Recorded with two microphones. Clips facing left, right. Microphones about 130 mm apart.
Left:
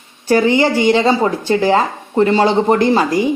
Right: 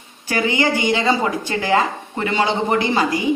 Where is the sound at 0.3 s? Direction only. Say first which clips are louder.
Left 7 dB; 30° left (ahead or behind).